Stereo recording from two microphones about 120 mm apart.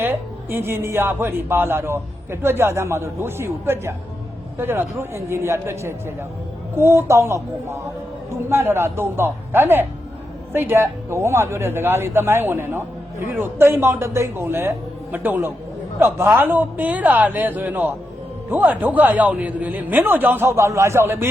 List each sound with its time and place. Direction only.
0.0 s a man's voice: 20° right (ahead or behind)